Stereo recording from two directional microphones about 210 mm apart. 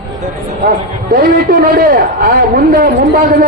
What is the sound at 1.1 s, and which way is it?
A man's voice, 40° right (ahead or behind).